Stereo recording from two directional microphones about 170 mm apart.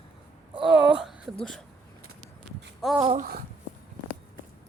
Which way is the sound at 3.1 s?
60° right (ahead or behind).